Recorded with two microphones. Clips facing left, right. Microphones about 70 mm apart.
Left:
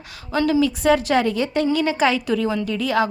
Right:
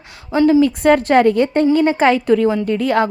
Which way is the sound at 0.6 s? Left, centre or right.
Right.